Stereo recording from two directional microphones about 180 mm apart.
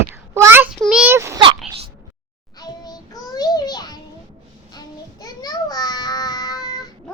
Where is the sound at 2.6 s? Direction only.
20° left (ahead or behind).